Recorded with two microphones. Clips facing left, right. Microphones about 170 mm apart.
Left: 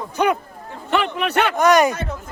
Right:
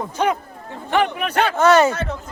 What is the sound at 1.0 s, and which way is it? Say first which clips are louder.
Speech: right 1 dB; 70° left (ahead or behind).